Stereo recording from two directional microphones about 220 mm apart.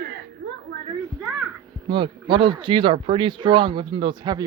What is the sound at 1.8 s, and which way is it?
Speech, 20° right (ahead or behind).